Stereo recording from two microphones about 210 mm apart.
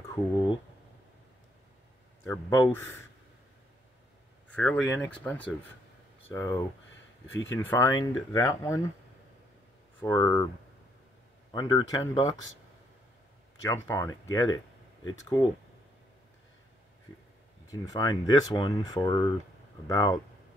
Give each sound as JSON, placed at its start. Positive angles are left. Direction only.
{"t": 0.1, "sound": "speech", "side_deg": 20}
{"t": 2.2, "sound": "speech", "side_deg": 15}
{"t": 4.5, "sound": "speech", "side_deg": 5}
{"t": 10.0, "sound": "speech", "side_deg": 15}
{"t": 11.5, "sound": "speech", "side_deg": 20}
{"t": 13.8, "sound": "speech", "side_deg": 15}
{"t": 17.6, "sound": "speech", "side_deg": 15}